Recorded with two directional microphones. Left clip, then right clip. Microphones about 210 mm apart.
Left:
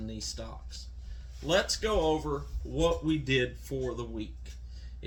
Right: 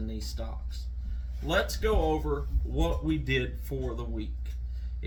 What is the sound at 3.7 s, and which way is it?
Speech, 10° left (ahead or behind).